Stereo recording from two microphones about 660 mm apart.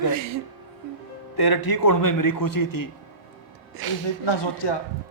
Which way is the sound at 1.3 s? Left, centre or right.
Left.